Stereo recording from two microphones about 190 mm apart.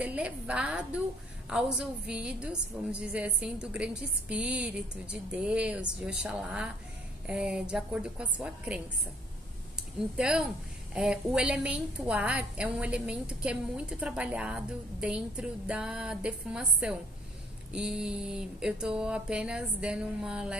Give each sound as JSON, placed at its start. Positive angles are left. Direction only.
{"t": 0.0, "sound": "a woman's voice", "side_deg": -5}